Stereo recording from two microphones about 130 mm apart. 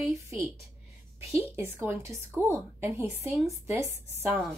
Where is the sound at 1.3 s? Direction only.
20° right (ahead or behind).